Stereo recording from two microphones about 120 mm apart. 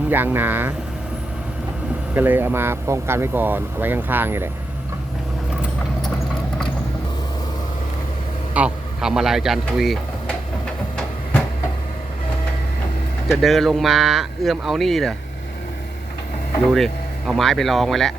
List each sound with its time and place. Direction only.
0.1 s speech: 15° right (ahead or behind)
2.1 s speech: 15° right (ahead or behind)
8.5 s speech: 5° right (ahead or behind)
10.9 s a sound: 10° left (ahead or behind)
13.2 s speech: centre (ahead or behind)
16.6 s speech: centre (ahead or behind)